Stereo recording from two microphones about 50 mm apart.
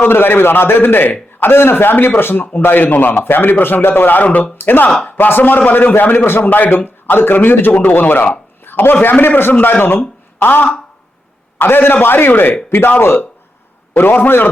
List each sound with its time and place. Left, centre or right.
0.0 s a man's voice: left
13.9 s a man's voice: left